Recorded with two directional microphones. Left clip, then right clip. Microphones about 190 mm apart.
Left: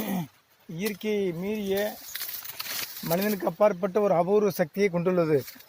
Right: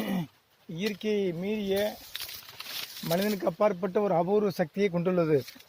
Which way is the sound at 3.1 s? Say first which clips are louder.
Left 1 dB; 50° left (ahead or behind).